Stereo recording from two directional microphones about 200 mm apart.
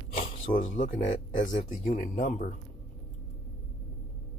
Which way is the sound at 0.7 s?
40° left (ahead or behind).